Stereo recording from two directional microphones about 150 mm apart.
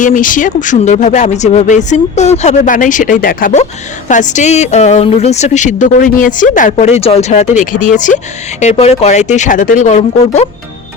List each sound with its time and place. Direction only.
0.0 s speech: 60° left (ahead or behind)
4.1 s a woman's voice: 55° left (ahead or behind)
8.6 s a woman's voice: 45° left (ahead or behind)